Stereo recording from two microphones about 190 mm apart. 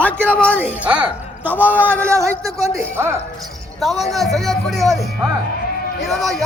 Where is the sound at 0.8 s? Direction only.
5° right (ahead or behind).